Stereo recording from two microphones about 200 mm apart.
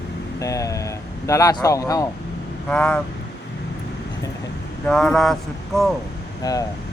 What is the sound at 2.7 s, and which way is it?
Speech, 5° left (ahead or behind).